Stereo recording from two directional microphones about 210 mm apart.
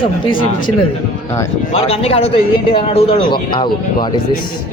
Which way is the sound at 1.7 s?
30° left (ahead or behind).